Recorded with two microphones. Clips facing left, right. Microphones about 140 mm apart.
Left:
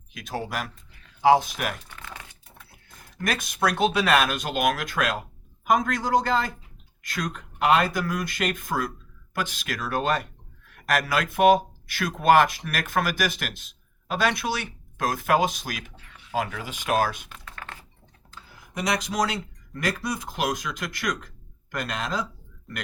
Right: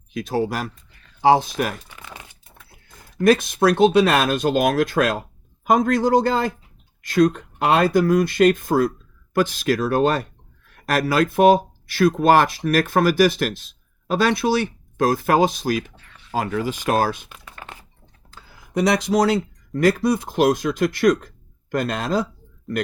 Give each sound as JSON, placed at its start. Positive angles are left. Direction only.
{"t": 0.1, "sound": "speech", "side_deg": -35}
{"t": 1.9, "sound": "crumpling", "side_deg": -15}
{"t": 3.2, "sound": "speech", "side_deg": -30}
{"t": 16.0, "sound": "a sound", "side_deg": 5}
{"t": 16.3, "sound": "speech", "side_deg": -35}
{"t": 17.2, "sound": "typing", "side_deg": -10}
{"t": 17.5, "sound": "a sound", "side_deg": -20}
{"t": 18.8, "sound": "speech", "side_deg": -30}